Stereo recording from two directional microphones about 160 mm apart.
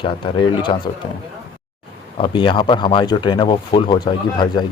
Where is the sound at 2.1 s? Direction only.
30° left (ahead or behind).